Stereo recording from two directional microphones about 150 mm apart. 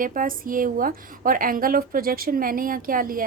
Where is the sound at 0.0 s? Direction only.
65° right (ahead or behind).